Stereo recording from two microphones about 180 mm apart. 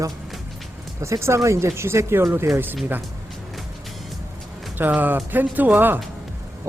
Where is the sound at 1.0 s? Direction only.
15° right (ahead or behind).